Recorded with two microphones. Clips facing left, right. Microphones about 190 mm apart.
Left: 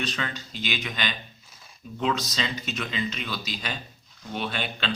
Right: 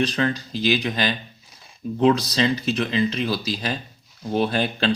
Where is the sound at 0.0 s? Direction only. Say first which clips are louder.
Right 10 dB; 35° right (ahead or behind).